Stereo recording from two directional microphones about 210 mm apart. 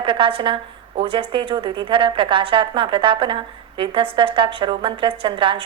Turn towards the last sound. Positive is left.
turn(degrees=-25)  # may be behind; listen again after turning